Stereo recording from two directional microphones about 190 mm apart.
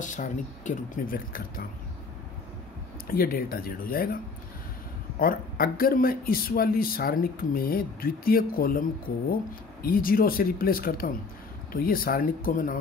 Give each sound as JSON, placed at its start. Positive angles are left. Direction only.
{"t": 0.0, "sound": "speech", "side_deg": 40}
{"t": 3.1, "sound": "speech", "side_deg": 50}
{"t": 5.2, "sound": "speech", "side_deg": 50}